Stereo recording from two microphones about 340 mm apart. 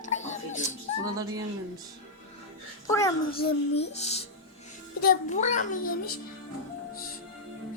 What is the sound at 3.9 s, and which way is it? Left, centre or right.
A child's voice, centre.